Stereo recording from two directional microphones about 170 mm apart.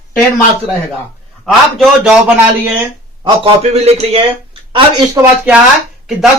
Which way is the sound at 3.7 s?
35° right (ahead or behind).